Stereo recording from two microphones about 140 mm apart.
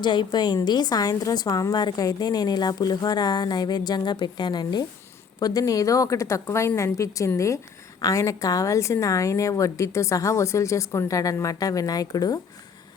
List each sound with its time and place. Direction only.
0.0 s a woman's voice: 35° left (ahead or behind)